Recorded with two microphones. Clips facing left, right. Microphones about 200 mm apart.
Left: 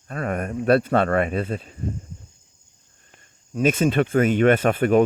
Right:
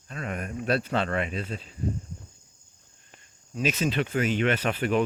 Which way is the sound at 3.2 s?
50° left (ahead or behind).